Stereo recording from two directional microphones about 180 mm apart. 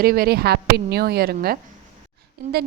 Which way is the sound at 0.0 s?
55° right (ahead or behind).